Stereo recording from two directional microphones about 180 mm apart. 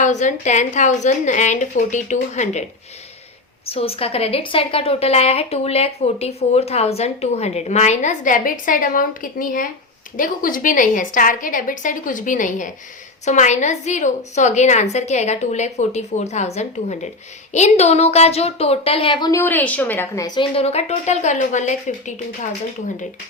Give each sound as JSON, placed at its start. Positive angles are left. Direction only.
{"t": 0.0, "sound": "a woman's voice", "side_deg": 45}
{"t": 3.7, "sound": "a woman's voice", "side_deg": 35}
{"t": 19.3, "sound": "a woman's voice", "side_deg": 10}